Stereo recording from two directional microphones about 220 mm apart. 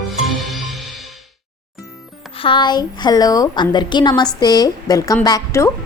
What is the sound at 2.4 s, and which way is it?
A woman's voice, 20° left (ahead or behind).